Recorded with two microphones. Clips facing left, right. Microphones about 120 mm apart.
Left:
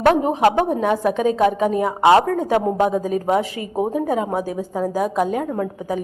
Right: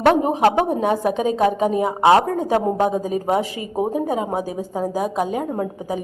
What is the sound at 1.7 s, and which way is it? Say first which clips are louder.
A woman's voice: even; 20° right (ahead or behind).